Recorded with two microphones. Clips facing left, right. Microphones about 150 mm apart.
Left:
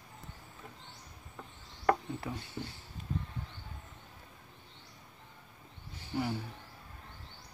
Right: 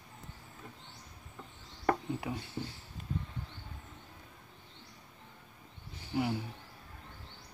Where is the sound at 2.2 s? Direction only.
15° right (ahead or behind).